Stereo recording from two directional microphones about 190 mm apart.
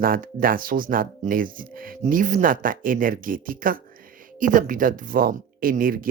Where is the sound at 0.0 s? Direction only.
50° right (ahead or behind).